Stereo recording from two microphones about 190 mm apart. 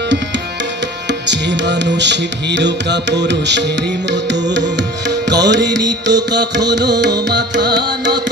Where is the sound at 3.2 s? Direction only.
65° right (ahead or behind).